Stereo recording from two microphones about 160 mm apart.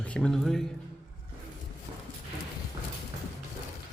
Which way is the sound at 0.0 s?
5° left (ahead or behind).